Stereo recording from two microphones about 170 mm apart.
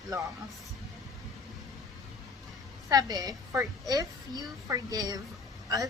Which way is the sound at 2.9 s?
20° right (ahead or behind).